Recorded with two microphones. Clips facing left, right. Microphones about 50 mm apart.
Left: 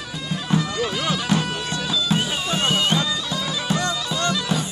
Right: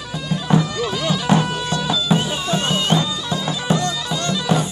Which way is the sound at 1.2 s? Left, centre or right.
Centre.